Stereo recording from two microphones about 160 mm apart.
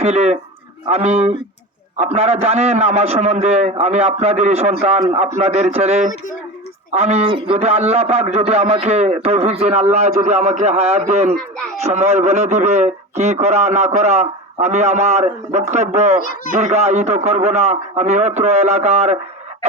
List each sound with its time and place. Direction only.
0.0 s a man's voice: 40° right (ahead or behind)